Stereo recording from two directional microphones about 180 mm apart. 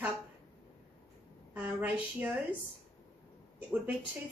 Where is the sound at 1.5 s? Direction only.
10° right (ahead or behind).